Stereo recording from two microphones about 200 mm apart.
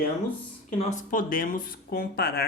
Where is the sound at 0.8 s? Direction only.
40° left (ahead or behind).